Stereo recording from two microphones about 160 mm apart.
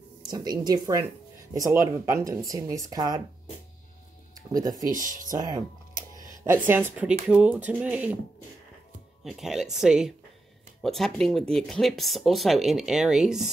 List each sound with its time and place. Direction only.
0.2 s speech: 25° right (ahead or behind)
4.5 s speech: 25° right (ahead or behind)
4.9 s speech: 55° right (ahead or behind)
5.4 s speech: 25° right (ahead or behind)
6.4 s speech: 15° right (ahead or behind)
9.2 s speech: centre (ahead or behind)